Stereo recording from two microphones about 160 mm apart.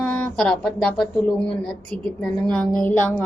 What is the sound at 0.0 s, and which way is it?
A woman's voice, 10° left (ahead or behind).